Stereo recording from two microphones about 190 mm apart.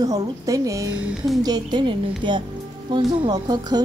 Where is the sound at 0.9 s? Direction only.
5° right (ahead or behind).